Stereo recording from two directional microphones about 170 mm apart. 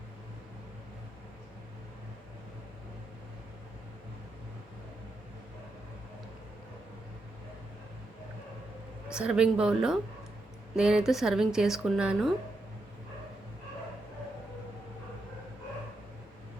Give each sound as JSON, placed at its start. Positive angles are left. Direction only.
{"t": 9.1, "sound": "a woman's voice", "side_deg": -5}